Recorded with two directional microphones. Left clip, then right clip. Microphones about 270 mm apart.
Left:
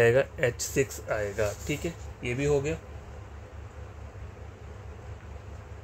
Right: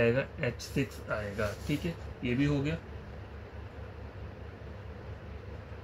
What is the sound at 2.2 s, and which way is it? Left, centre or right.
Speech, left.